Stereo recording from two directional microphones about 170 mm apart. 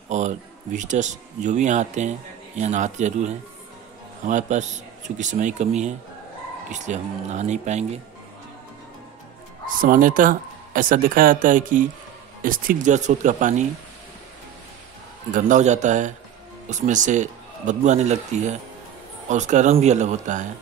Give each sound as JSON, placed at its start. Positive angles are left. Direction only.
{"t": 0.1, "sound": "speech", "side_deg": -45}
{"t": 6.7, "sound": "speech", "side_deg": -45}
{"t": 9.7, "sound": "speech", "side_deg": -55}
{"t": 15.3, "sound": "speech", "side_deg": -45}